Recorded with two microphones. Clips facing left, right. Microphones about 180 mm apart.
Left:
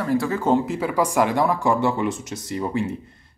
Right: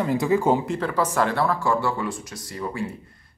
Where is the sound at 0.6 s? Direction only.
10° left (ahead or behind).